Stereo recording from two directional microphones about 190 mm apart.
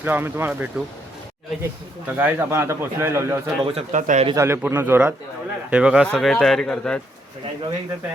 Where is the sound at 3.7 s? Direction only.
35° right (ahead or behind).